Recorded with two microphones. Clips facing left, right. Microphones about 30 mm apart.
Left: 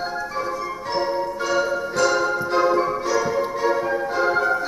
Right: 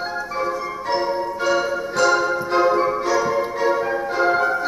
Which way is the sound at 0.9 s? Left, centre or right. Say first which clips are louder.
Right 2 dB; centre.